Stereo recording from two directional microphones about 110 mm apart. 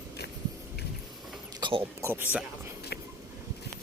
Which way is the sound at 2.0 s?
20° right (ahead or behind).